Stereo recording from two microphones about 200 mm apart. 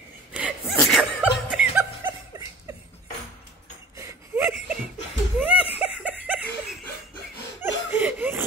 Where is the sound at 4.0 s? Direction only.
15° right (ahead or behind).